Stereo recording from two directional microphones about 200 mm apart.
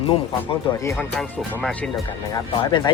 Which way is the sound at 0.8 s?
15° left (ahead or behind).